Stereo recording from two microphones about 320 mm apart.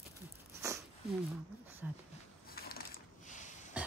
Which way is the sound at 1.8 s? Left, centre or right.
Centre.